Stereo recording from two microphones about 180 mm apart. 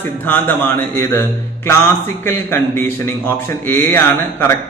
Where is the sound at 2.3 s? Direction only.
15° left (ahead or behind).